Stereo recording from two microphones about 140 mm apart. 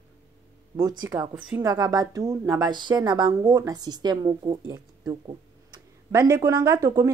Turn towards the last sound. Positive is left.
turn(degrees=-25)  # may be behind; listen again after turning